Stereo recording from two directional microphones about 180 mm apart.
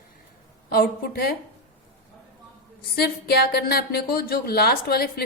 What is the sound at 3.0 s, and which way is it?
A woman's voice, 60° left (ahead or behind).